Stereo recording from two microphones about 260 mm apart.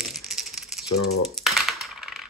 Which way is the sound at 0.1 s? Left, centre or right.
Centre.